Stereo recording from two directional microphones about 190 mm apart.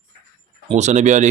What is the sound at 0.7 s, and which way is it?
Speech, 35° right (ahead or behind).